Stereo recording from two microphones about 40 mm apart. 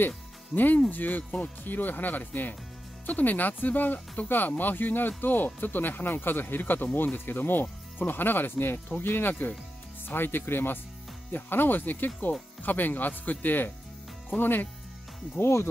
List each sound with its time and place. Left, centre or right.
0.6 s speech: left
1.6 s speech: left